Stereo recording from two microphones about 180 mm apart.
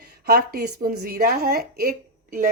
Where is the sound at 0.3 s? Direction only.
60° right (ahead or behind).